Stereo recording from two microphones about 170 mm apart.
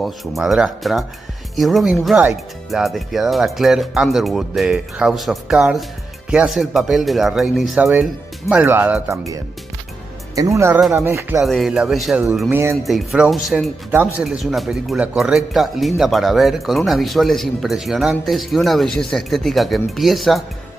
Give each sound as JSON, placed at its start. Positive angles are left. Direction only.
{"t": 0.0, "sound": "speech", "side_deg": 0}
{"t": 11.4, "sound": "speech", "side_deg": 0}